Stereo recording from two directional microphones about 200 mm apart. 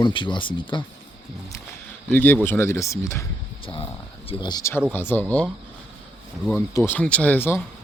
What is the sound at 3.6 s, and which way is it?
A man's voice, 25° left (ahead or behind).